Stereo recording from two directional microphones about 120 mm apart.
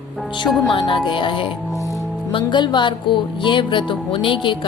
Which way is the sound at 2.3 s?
40° left (ahead or behind).